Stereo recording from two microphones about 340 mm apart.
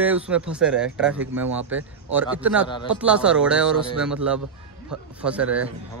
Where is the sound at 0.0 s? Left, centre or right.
Centre.